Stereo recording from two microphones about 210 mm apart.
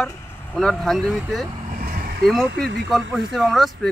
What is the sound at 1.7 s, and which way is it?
Vehicle, 45° right (ahead or behind).